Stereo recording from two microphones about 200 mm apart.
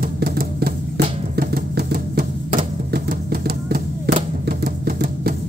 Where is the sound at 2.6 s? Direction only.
50° right (ahead or behind).